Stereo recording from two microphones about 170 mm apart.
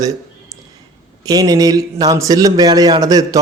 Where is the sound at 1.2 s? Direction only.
25° right (ahead or behind).